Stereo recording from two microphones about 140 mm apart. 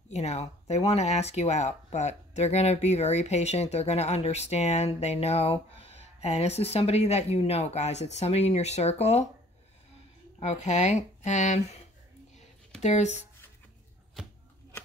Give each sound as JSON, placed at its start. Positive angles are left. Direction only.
{"t": 0.1, "sound": "speech", "side_deg": 50}
{"t": 10.4, "sound": "speech", "side_deg": 55}
{"t": 12.8, "sound": "speech", "side_deg": 55}